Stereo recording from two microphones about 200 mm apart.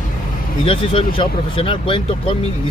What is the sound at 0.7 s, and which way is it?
Speech, 25° left (ahead or behind).